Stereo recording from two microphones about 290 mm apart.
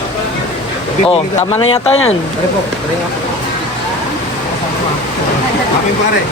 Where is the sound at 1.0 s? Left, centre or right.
Left.